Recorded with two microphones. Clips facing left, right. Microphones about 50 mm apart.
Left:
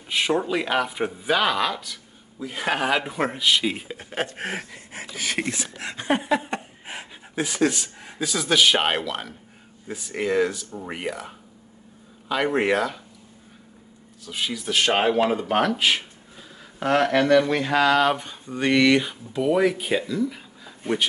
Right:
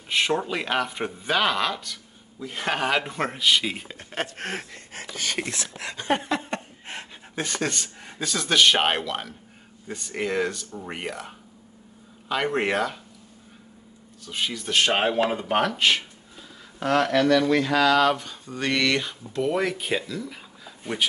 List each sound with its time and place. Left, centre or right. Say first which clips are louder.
0.1 s speech: left 1 dB; centre
14.2 s speech: left 1 dB; centre
16.8 s speech: left 1 dB; left; by 21.1 s centre